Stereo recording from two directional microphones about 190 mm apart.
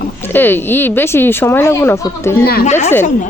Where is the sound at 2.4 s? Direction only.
55° left (ahead or behind).